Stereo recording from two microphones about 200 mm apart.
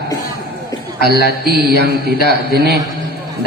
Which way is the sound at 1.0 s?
55° right (ahead or behind).